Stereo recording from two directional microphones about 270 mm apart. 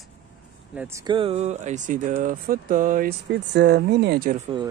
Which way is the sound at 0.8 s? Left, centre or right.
Centre.